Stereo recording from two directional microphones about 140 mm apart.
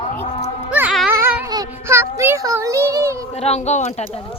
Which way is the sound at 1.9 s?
20° right (ahead or behind).